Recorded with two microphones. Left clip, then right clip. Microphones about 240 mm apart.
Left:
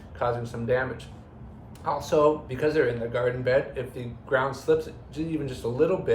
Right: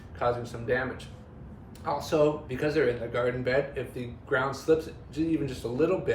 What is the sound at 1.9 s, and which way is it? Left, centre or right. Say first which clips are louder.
Speech: left 3 dB; centre.